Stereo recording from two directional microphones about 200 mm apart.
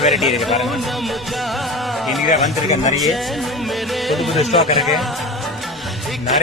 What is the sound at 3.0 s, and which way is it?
Speech, centre (ahead or behind).